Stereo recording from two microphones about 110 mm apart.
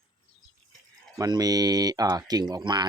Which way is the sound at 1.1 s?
35° right (ahead or behind).